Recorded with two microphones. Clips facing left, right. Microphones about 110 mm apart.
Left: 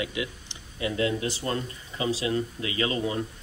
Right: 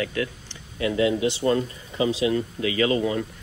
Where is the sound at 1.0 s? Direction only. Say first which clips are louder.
Right 6 dB; 20° right (ahead or behind).